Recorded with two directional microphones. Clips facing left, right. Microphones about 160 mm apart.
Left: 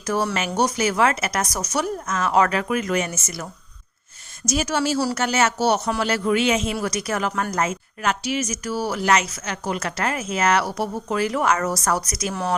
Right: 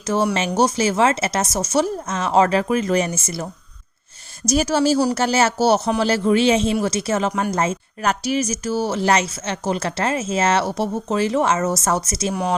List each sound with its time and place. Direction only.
0.0 s speech: 25° right (ahead or behind)
12.3 s speech: 15° right (ahead or behind)